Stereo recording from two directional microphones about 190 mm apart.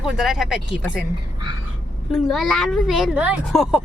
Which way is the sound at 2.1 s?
Centre (ahead or behind).